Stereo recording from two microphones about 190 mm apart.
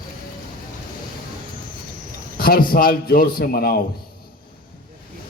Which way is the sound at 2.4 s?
50° left (ahead or behind).